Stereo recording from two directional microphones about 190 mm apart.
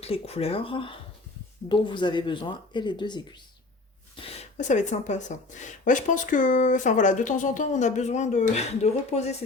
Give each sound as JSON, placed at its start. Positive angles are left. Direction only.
{"t": 0.0, "sound": "speech", "side_deg": 30}
{"t": 4.2, "sound": "speech", "side_deg": 35}